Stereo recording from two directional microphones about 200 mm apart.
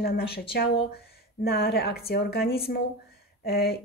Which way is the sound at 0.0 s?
50° left (ahead or behind).